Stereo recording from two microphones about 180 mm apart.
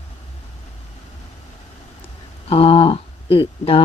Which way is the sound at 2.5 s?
30° left (ahead or behind).